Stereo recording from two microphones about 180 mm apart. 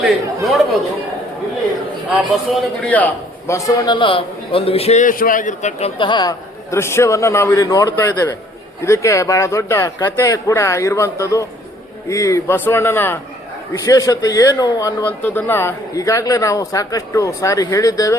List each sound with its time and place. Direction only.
0.0 s speech: centre (ahead or behind)
2.5 s speech: 5° left (ahead or behind)
3.9 s a man's voice: 30° left (ahead or behind)
6.0 s speech: 25° left (ahead or behind)